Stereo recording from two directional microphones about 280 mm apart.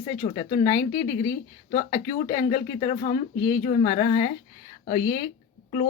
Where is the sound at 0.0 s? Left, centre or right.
Centre.